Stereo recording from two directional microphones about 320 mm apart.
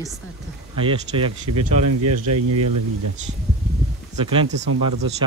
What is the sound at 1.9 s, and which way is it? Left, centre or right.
Speech, right.